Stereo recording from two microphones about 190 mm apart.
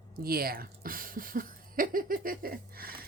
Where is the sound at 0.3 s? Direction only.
50° right (ahead or behind).